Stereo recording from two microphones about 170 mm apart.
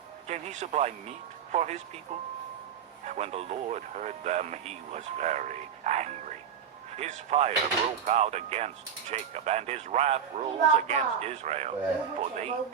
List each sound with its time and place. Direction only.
0.3 s speech: 40° right (ahead or behind)
3.1 s speech: 40° right (ahead or behind)